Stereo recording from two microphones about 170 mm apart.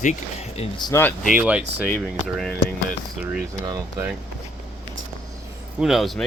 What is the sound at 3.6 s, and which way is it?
Speech, 20° right (ahead or behind).